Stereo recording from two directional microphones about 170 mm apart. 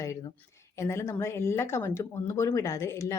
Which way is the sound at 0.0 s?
20° left (ahead or behind).